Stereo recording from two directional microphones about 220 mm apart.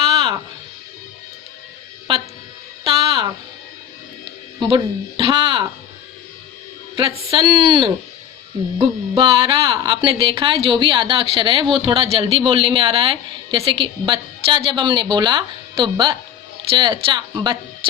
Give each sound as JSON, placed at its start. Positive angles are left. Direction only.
{"t": 0.1, "sound": "music", "side_deg": -20}
{"t": 2.8, "sound": "music", "side_deg": -20}
{"t": 4.6, "sound": "speech", "side_deg": -25}
{"t": 7.3, "sound": "speech", "side_deg": -20}